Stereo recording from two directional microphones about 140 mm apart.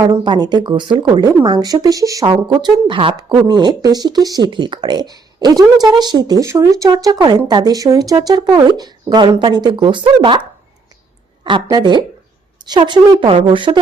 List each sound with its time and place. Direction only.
0.0 s speech: 30° right (ahead or behind)
11.4 s speech: 35° right (ahead or behind)